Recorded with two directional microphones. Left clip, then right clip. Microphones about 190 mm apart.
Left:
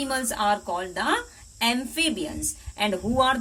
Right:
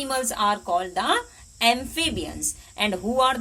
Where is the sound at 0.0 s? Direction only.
40° right (ahead or behind).